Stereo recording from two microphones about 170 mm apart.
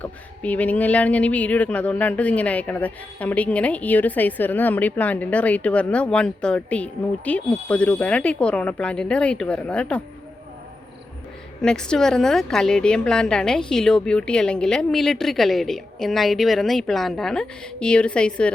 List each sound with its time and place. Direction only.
0.0 s speech: 10° left (ahead or behind)
11.6 s a woman's voice: 5° left (ahead or behind)